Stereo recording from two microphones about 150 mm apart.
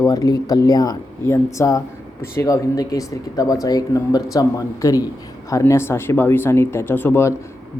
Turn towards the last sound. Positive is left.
turn(degrees=15)  # may be behind; listen again after turning